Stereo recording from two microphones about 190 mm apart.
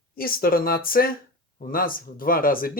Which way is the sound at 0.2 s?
50° left (ahead or behind).